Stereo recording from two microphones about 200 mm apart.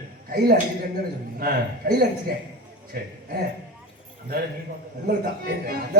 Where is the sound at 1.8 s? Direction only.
50° right (ahead or behind).